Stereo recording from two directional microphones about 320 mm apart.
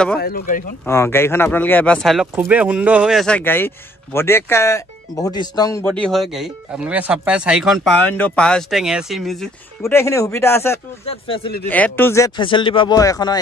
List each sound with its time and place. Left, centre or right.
0.2 s speech: left
0.8 s speech: centre
11.6 s speech: centre